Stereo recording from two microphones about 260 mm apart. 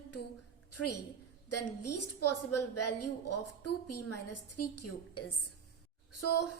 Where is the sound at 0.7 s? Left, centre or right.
Left.